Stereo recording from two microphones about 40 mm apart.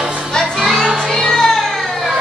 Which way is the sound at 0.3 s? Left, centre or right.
Centre.